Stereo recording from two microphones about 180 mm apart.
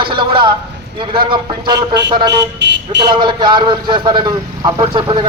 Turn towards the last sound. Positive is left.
turn(degrees=-25)  # may be behind; listen again after turning